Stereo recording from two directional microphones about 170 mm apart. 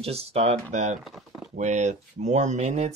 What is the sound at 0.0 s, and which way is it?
Speech, 35° right (ahead or behind).